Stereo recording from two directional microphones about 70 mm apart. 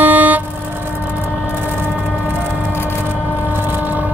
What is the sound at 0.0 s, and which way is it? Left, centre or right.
Vehicle, right.